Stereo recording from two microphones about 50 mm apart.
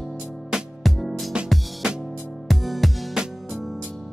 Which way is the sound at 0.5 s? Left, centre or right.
Centre.